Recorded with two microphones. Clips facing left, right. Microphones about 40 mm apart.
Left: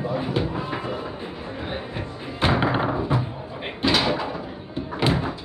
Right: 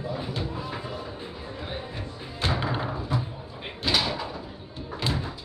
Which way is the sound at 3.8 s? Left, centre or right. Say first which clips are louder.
Left 5 dB; left.